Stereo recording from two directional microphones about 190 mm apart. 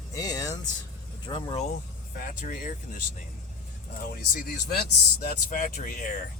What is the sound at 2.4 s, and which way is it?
Speech, 40° left (ahead or behind).